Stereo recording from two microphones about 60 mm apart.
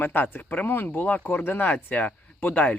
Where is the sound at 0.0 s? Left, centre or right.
Left.